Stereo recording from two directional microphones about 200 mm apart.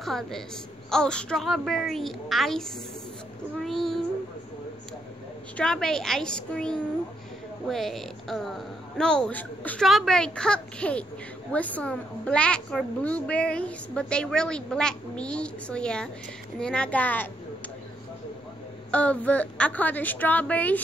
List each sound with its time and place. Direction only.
0.0 s a woman's voice: centre (ahead or behind)
3.6 s a woman's voice: centre (ahead or behind)
5.6 s a woman's voice: 5° left (ahead or behind)
18.9 s a woman's voice: 5° left (ahead or behind)